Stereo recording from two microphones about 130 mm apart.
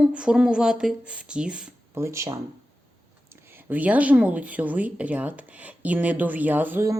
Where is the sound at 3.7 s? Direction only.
10° right (ahead or behind).